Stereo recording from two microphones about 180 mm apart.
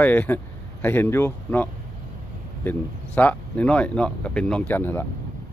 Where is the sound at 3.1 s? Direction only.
10° left (ahead or behind).